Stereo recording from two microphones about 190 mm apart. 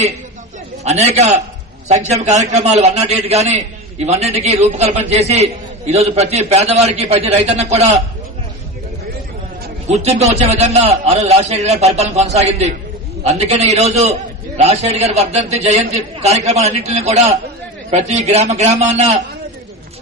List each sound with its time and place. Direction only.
0.9 s a man's voice: 35° right (ahead or behind)
9.9 s a man's voice: 35° right (ahead or behind)